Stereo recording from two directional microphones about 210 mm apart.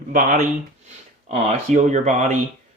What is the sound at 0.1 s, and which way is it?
Speech, 40° right (ahead or behind).